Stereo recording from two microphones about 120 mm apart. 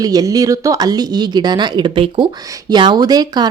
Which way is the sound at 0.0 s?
30° right (ahead or behind).